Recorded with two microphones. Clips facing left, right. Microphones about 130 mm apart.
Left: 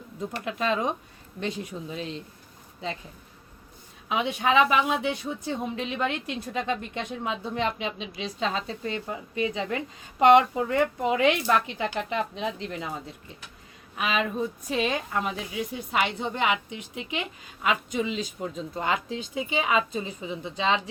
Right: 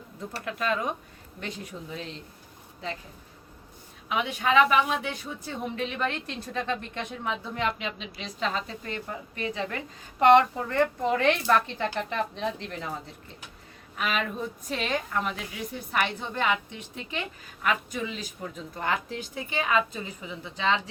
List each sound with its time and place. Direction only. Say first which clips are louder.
0.4 s a woman's voice: left 2 dB; 20° left (ahead or behind)
4.1 s a woman's voice: left 1 dB; 20° left (ahead or behind)
13.9 s a woman's voice: left 2 dB; 15° left (ahead or behind)